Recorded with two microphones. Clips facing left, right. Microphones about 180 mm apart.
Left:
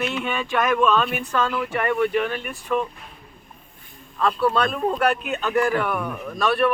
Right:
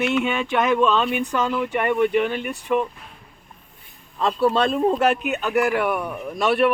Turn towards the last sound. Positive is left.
turn(degrees=-20)  # may be behind; listen again after turning